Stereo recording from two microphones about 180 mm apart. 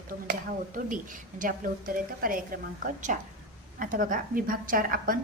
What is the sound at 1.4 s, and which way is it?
A woman's voice, 50° right (ahead or behind).